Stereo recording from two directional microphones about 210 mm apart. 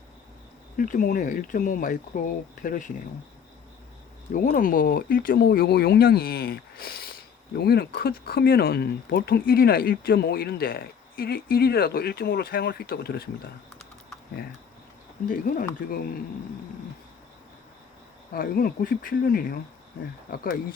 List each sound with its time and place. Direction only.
0.8 s speech: 40° left (ahead or behind)
4.4 s speech: 40° left (ahead or behind)
15.3 s speech: 40° left (ahead or behind)
18.3 s speech: 45° left (ahead or behind)